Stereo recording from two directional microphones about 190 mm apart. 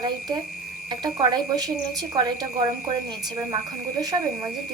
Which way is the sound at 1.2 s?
20° right (ahead or behind).